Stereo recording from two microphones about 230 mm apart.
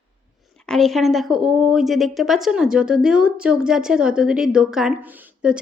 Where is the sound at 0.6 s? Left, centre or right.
Centre.